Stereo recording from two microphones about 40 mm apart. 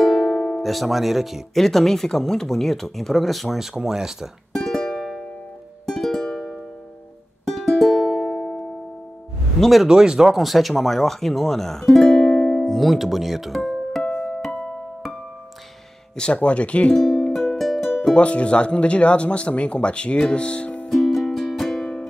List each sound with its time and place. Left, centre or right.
0.0 s music: centre
0.6 s speech: centre
1.5 s speech: centre
4.6 s music: centre
9.6 s speech: centre
9.8 s speech: centre
10.3 s speech: centre
12.5 s music: centre
14.0 s music: left
16.2 s speech: left
16.9 s music: centre
18.1 s speech: left
20.9 s music: centre